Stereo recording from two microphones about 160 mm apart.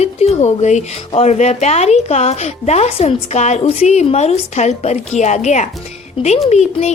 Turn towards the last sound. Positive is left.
turn(degrees=45)  # may be behind; listen again after turning